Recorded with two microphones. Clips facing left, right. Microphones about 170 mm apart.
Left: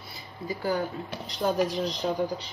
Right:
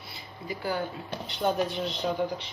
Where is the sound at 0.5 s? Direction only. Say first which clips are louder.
Left 3 dB; 40° left (ahead or behind).